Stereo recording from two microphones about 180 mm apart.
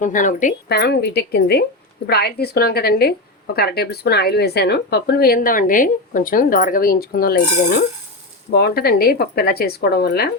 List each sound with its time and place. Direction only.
0.0 s speech: 45° left (ahead or behind)
0.7 s a woman's voice: 65° left (ahead or behind)